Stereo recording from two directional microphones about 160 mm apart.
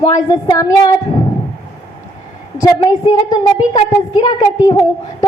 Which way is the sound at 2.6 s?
25° left (ahead or behind).